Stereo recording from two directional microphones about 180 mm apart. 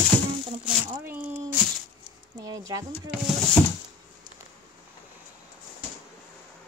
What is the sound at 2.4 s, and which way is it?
Speech, 20° right (ahead or behind).